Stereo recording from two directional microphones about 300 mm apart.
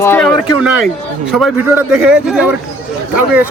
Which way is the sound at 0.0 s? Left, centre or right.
Centre.